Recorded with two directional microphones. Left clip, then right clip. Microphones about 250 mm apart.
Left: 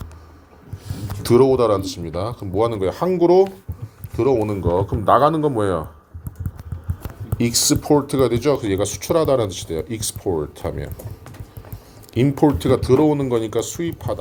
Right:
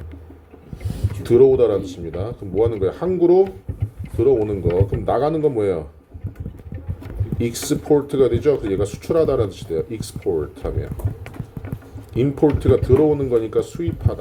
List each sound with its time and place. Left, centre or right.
1.3 s speech: left
7.3 s speech: left
12.1 s speech: left